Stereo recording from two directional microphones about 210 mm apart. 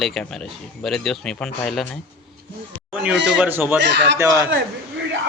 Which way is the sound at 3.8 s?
55° right (ahead or behind).